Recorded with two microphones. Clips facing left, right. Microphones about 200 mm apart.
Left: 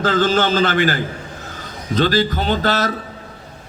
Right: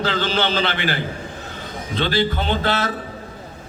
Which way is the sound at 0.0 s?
45° left (ahead or behind).